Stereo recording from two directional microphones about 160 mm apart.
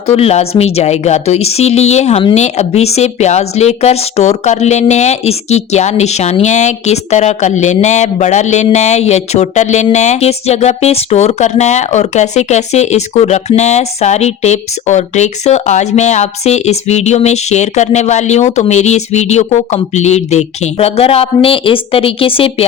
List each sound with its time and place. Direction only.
0.1 s speech: 40° left (ahead or behind)